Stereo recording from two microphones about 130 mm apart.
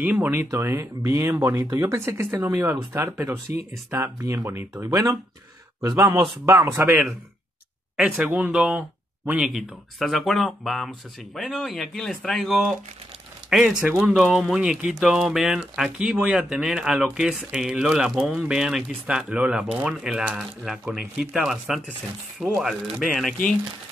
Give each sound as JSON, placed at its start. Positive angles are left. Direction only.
{"t": 0.0, "sound": "speech", "side_deg": -15}
{"t": 6.0, "sound": "speech", "side_deg": -35}
{"t": 6.4, "sound": "speech", "side_deg": -20}